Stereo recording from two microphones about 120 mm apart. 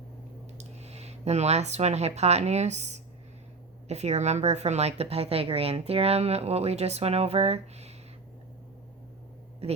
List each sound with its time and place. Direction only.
0.6 s speech: 65° right (ahead or behind)